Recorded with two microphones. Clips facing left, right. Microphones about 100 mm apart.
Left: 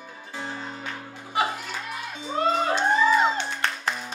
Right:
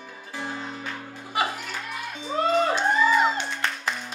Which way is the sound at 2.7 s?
Centre (ahead or behind).